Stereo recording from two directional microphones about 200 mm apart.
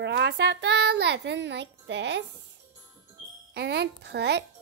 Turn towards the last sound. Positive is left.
turn(degrees=-55)  # may be behind; listen again after turning